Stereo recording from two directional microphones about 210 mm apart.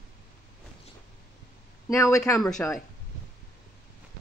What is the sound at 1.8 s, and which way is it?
Speech, 15° left (ahead or behind).